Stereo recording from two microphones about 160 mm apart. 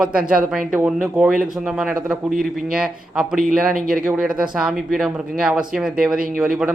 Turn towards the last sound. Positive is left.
turn(degrees=0)  # may be behind; listen again after turning